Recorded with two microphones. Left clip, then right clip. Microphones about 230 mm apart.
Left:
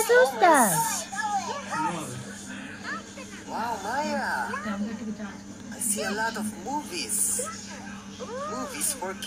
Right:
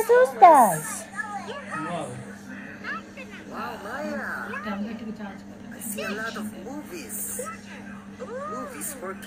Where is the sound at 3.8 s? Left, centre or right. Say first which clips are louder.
Left 3 dB; left.